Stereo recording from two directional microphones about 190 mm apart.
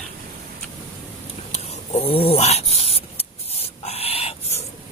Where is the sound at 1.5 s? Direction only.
35° left (ahead or behind).